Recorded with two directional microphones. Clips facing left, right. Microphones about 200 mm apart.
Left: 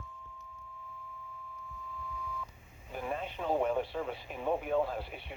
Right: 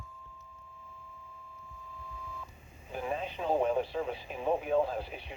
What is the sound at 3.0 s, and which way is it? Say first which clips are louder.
Radio: right 2 dB; 20° right (ahead or behind).